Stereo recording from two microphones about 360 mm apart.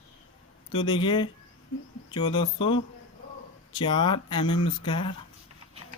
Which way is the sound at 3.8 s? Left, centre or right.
Centre.